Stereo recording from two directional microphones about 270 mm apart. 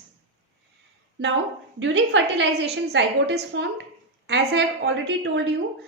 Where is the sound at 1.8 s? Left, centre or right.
Right.